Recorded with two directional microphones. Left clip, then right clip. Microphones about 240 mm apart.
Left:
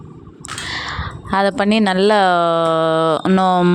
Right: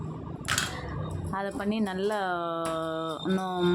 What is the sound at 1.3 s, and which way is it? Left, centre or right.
Speech, left.